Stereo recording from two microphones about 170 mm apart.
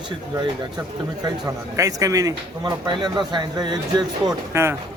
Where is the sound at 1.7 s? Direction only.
20° right (ahead or behind).